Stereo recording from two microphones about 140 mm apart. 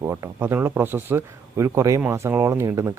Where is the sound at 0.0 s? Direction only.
20° right (ahead or behind).